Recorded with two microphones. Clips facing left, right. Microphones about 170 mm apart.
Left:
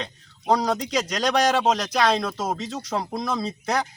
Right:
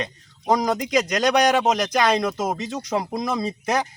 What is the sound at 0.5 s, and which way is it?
A man's voice, 15° right (ahead or behind).